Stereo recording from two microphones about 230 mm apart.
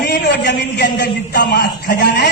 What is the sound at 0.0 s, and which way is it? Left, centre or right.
A man's voice, left.